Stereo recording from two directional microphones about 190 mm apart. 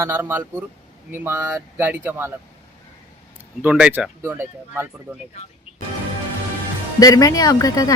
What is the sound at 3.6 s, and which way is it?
Speech, 5° right (ahead or behind).